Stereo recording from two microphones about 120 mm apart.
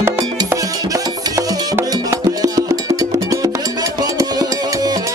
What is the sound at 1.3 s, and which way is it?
Music, 30° right (ahead or behind).